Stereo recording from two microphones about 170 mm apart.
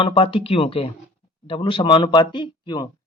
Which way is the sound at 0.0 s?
30° left (ahead or behind).